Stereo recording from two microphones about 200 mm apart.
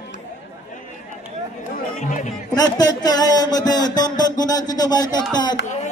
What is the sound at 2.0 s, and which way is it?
Speech, 40° left (ahead or behind).